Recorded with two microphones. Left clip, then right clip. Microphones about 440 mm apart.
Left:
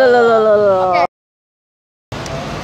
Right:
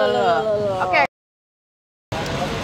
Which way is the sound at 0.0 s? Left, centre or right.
Left.